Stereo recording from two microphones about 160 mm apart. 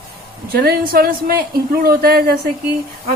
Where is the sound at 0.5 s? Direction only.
70° right (ahead or behind).